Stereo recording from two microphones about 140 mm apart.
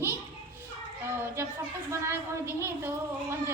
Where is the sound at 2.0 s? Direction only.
20° right (ahead or behind).